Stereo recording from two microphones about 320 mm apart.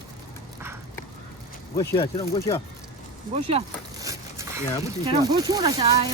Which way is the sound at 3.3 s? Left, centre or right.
Centre.